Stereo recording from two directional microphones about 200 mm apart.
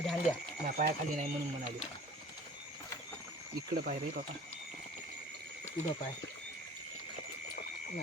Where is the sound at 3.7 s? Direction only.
50° right (ahead or behind).